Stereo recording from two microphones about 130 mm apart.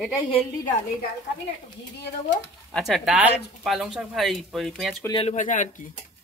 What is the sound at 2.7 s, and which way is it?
Speech, centre (ahead or behind).